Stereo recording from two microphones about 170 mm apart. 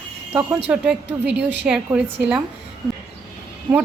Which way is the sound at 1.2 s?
90° right.